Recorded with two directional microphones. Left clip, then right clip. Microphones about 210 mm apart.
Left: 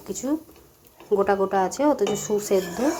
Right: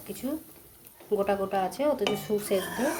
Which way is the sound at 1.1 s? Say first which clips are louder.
Left 6 dB; 15° left (ahead or behind).